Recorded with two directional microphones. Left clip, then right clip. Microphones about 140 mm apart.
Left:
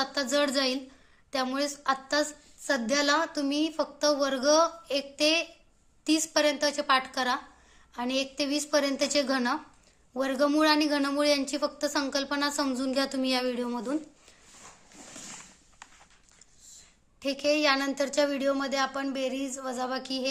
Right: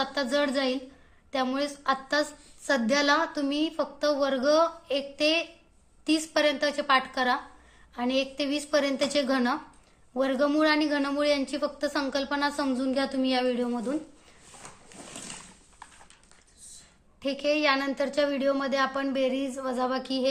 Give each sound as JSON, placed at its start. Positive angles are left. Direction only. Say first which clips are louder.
{"t": 0.0, "sound": "a woman's voice", "louder": "even", "side_deg": 35}
{"t": 17.2, "sound": "a woman's voice", "louder": "even", "side_deg": 35}